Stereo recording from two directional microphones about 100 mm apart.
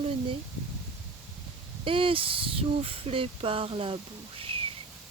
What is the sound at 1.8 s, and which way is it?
Speech, 60° right (ahead or behind).